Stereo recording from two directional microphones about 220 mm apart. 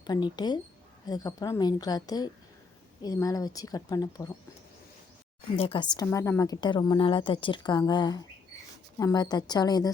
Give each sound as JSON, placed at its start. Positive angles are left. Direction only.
{"t": 0.0, "sound": "a woman's voice", "side_deg": 20}
{"t": 5.5, "sound": "a woman's voice", "side_deg": 25}